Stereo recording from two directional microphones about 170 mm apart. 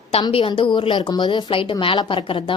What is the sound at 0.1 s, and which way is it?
A woman's voice, 30° left (ahead or behind).